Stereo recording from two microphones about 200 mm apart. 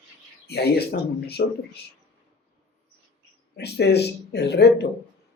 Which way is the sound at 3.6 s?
55° left (ahead or behind).